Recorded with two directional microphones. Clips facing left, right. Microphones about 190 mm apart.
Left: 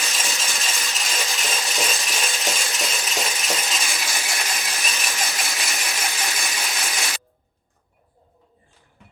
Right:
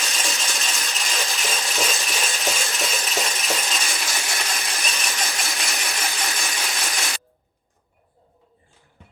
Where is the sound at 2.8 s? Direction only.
Centre (ahead or behind).